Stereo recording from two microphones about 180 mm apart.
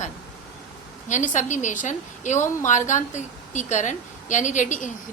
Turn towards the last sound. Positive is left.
turn(degrees=45)  # may be behind; listen again after turning